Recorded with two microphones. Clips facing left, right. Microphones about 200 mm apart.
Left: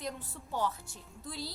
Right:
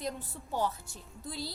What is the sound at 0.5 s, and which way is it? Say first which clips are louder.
Speech: right 1 dB; 40° right (ahead or behind).